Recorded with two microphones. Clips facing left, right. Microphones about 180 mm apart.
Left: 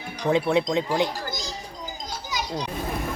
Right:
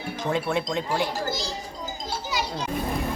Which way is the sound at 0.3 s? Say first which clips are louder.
Left 5 dB; 20° left (ahead or behind).